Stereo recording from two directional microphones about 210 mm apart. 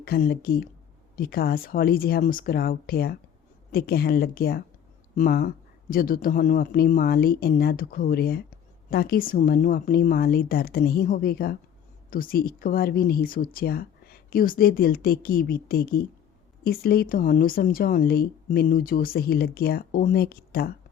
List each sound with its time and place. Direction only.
0.0 s speech: 45° left (ahead or behind)